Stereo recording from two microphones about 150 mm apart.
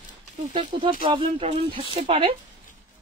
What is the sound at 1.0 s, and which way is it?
A woman's voice, 40° right (ahead or behind).